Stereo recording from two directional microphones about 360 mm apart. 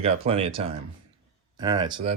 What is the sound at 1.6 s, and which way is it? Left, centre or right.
Speech, centre.